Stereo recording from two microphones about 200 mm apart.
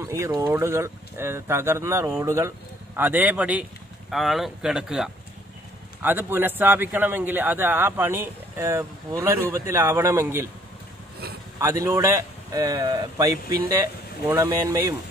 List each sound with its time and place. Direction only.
0.1 s a man's voice: 15° right (ahead or behind)
11.6 s a man's voice: 15° right (ahead or behind)